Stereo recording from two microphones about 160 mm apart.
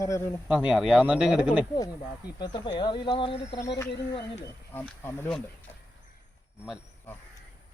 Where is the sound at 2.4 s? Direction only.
30° left (ahead or behind).